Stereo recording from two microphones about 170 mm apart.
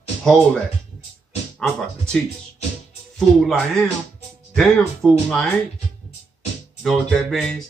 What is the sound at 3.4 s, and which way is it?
Speech, centre (ahead or behind).